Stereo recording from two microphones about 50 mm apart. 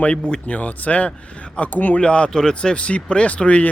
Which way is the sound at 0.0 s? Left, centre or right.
Left.